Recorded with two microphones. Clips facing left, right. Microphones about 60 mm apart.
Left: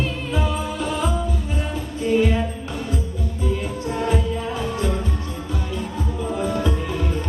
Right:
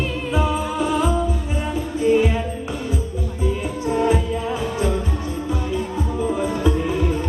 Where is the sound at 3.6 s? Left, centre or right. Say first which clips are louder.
Right 4 dB; centre.